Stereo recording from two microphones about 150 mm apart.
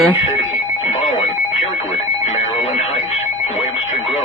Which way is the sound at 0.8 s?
45° left (ahead or behind).